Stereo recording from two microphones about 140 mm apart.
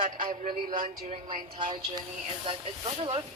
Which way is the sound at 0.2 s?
80° right.